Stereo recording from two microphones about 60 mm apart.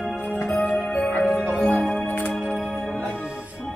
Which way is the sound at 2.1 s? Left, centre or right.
Left.